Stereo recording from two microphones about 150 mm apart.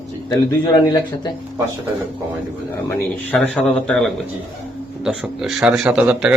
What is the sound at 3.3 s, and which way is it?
A man's voice, centre (ahead or behind).